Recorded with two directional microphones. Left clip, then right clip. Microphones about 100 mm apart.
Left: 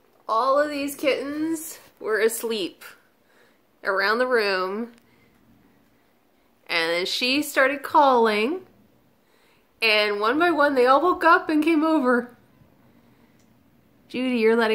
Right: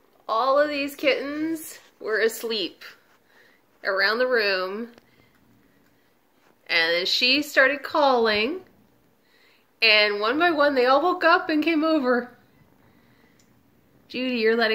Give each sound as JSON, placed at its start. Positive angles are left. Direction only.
{"t": 0.6, "sound": "a woman's voice", "side_deg": 15}
{"t": 1.5, "sound": "speech", "side_deg": 30}
{"t": 2.2, "sound": "speech", "side_deg": 55}
{"t": 6.6, "sound": "speech", "side_deg": 50}
{"t": 9.8, "sound": "a woman's voice", "side_deg": 35}
{"t": 14.1, "sound": "speech", "side_deg": 60}